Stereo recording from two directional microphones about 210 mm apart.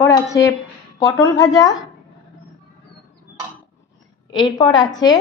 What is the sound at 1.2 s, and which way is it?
Speech, 20° left (ahead or behind).